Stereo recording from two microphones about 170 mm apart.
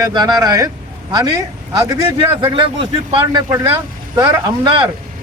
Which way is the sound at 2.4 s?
30° right (ahead or behind).